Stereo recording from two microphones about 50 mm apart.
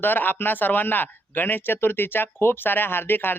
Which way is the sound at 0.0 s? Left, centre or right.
Left.